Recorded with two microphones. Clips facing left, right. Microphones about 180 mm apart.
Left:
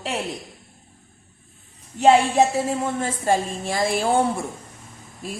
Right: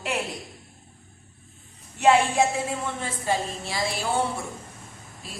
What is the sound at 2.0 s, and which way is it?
A woman's voice, 35° left (ahead or behind).